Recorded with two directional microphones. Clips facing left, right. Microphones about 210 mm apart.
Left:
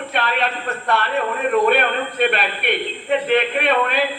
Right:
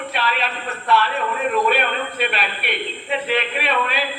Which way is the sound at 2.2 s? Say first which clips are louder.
Left 8 dB; 50° left (ahead or behind).